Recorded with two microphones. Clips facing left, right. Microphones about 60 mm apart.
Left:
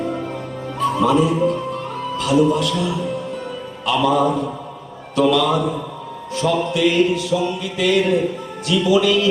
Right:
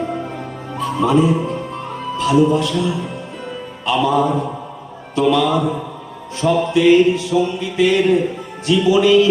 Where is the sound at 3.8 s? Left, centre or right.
Right.